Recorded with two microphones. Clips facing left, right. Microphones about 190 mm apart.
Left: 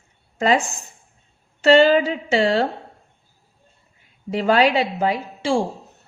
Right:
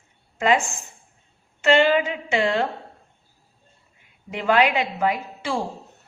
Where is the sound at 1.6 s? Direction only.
35° left (ahead or behind).